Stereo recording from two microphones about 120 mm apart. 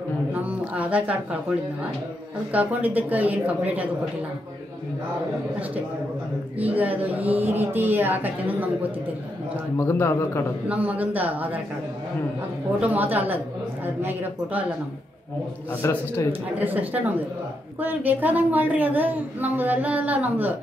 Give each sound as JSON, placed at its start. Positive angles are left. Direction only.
{"t": 0.3, "sound": "a woman's voice", "side_deg": -10}
{"t": 6.6, "sound": "a woman's voice", "side_deg": -15}
{"t": 9.8, "sound": "a man's voice", "side_deg": 20}
{"t": 10.7, "sound": "a woman's voice", "side_deg": -10}
{"t": 12.8, "sound": "a woman's voice", "side_deg": -15}
{"t": 15.7, "sound": "a man's voice", "side_deg": 20}
{"t": 16.5, "sound": "a woman's voice", "side_deg": -15}